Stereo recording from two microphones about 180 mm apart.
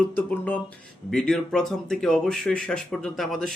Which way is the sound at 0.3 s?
10° left (ahead or behind).